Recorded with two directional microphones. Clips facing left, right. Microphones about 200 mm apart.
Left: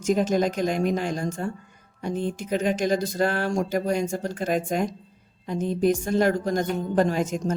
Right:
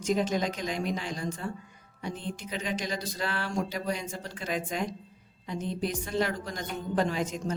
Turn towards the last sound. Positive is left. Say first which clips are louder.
# left 6 dB
turn(degrees=45)  # may be behind; listen again after turning